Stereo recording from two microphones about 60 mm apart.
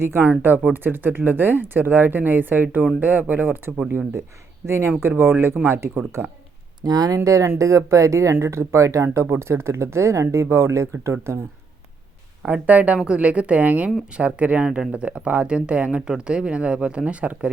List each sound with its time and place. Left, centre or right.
0.0 s speech: right
3.8 s speech: right
6.8 s speech: right
7.3 s speech: right
9.2 s speech: right
12.6 s speech: right